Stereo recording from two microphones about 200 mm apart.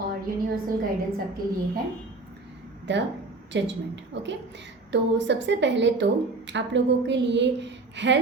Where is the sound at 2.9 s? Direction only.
60° right (ahead or behind).